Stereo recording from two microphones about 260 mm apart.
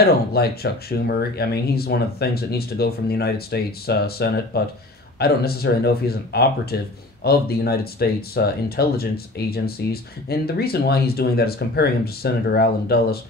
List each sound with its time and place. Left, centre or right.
0.0 s speech: left